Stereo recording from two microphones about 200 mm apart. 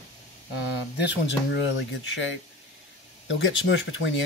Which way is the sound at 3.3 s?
70° left (ahead or behind).